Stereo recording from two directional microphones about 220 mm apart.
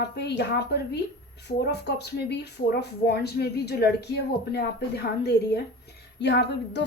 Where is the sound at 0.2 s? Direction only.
50° left (ahead or behind).